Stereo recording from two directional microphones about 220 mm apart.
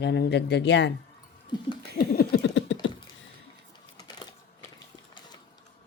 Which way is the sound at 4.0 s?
20° left (ahead or behind).